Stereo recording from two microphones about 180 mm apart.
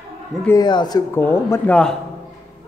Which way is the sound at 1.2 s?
15° left (ahead or behind).